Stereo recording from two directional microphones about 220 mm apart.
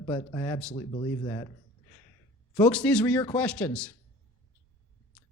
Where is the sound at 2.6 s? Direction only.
5° left (ahead or behind).